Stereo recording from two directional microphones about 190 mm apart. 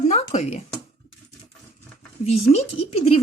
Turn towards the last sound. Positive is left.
turn(degrees=30)  # may be behind; listen again after turning